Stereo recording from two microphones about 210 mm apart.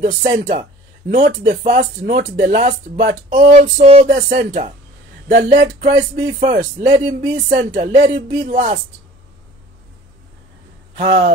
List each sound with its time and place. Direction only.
0.0 s speech: 35° right (ahead or behind)
11.0 s speech: 35° right (ahead or behind)